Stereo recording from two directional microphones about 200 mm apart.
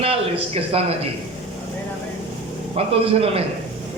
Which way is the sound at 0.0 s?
30° right (ahead or behind).